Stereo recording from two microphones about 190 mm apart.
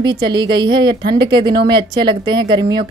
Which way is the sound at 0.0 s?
25° right (ahead or behind).